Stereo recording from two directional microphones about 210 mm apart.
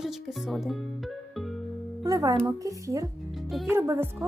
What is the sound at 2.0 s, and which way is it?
Speech, 15° right (ahead or behind).